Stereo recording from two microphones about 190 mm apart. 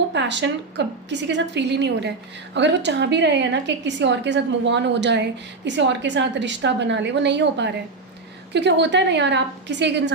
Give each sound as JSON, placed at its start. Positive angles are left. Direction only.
{"t": 0.1, "sound": "a woman's voice", "side_deg": -70}